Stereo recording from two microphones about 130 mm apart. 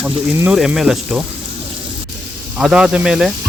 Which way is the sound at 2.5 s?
5° right (ahead or behind).